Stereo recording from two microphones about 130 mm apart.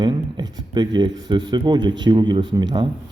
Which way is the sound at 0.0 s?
30° right (ahead or behind).